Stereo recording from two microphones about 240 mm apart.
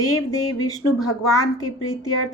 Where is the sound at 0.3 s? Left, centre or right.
Centre.